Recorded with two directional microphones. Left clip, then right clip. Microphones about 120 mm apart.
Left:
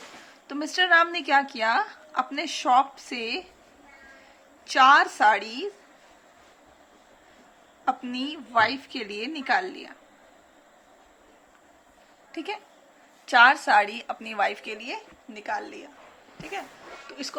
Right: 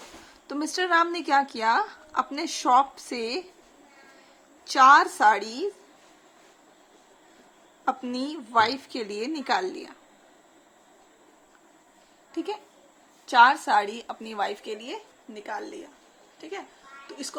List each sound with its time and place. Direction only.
0.4 s speech: 35° right (ahead or behind)
4.6 s a woman's voice: 35° right (ahead or behind)
7.9 s speech: 40° right (ahead or behind)
12.3 s a woman's voice: 35° right (ahead or behind); by 17.3 s 15° right (ahead or behind)